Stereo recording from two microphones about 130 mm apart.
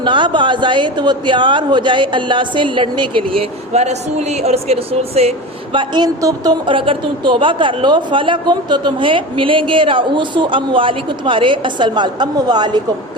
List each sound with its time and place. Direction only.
0.0 s a woman's voice: 40° right (ahead or behind)
3.7 s speech: 60° right (ahead or behind)
5.7 s a woman's voice: 35° right (ahead or behind)